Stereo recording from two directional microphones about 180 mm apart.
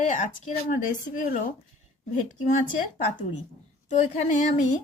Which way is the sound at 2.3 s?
45° left (ahead or behind).